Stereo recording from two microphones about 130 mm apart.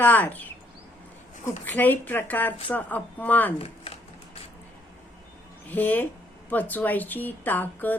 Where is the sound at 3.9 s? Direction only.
45° left (ahead or behind).